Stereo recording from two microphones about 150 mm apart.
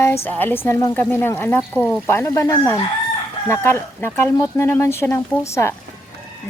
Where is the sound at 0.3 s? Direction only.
15° left (ahead or behind).